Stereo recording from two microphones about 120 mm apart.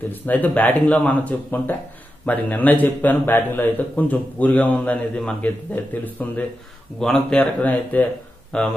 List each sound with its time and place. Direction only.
0.1 s a man's voice: 15° left (ahead or behind)